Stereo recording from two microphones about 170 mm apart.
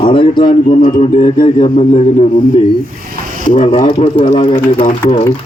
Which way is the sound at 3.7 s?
40° left (ahead or behind).